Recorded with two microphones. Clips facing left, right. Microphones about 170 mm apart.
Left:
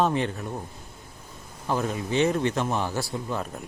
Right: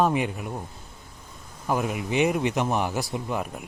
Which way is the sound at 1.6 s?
10° right (ahead or behind).